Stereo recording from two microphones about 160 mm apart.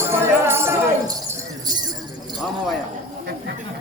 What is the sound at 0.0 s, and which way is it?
Jingle bell, 15° right (ahead or behind).